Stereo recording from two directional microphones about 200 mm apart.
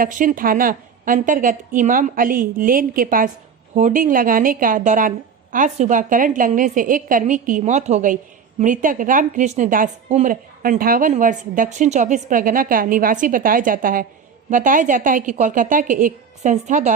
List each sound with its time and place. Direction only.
0.0 s a woman's voice: 40° right (ahead or behind)